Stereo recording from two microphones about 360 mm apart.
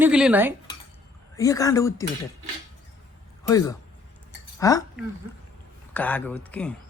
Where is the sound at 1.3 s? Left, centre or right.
Centre.